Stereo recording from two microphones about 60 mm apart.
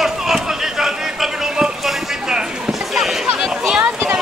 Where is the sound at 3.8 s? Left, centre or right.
Right.